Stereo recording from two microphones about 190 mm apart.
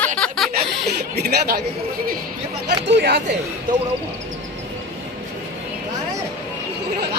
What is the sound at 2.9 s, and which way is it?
Speech, 65° right (ahead or behind).